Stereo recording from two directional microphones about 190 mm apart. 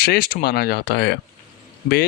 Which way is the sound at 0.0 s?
55° left (ahead or behind).